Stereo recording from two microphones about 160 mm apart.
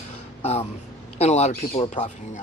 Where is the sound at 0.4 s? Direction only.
40° left (ahead or behind).